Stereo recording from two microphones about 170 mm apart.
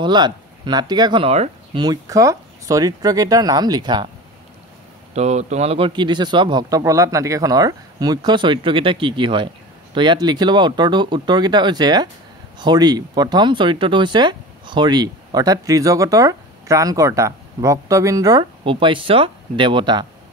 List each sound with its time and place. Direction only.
0.0 s speech: 25° right (ahead or behind)
1.8 s speech: 20° right (ahead or behind)
5.1 s speech: 40° right (ahead or behind)